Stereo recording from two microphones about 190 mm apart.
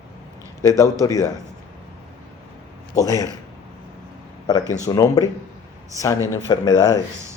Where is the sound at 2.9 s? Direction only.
15° left (ahead or behind).